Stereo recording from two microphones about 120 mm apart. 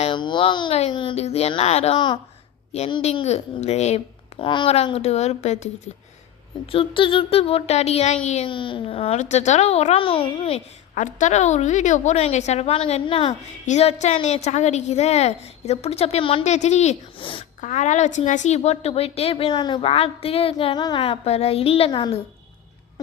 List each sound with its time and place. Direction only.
0.1 s speech: 40° left (ahead or behind)
0.7 s a woman's voice: 55° left (ahead or behind)
4.4 s a sound: 45° left (ahead or behind)
4.9 s a woman's voice: 60° left (ahead or behind)
6.7 s a woman's voice: 45° left (ahead or behind); by 8.4 s 65° left (ahead or behind)
8.4 s a woman's voice: 45° left (ahead or behind)
10.9 s a woman's voice: 90° left; by 13.3 s 50° left (ahead or behind)
13.7 s a woman's voice: 70° left (ahead or behind); by 16.4 s 55° left (ahead or behind)
16.4 s a woman's voice: 75° left (ahead or behind)
17.2 s a sound: 45° left (ahead or behind)
17.6 s a woman's voice: 85° left; by 19.8 s 40° left (ahead or behind)
19.8 s a sound: 55° left (ahead or behind)